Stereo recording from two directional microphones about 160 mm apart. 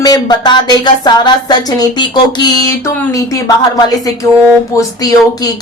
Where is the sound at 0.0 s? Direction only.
25° left (ahead or behind).